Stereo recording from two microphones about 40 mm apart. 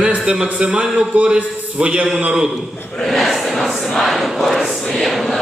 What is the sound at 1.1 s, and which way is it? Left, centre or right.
Speech, right.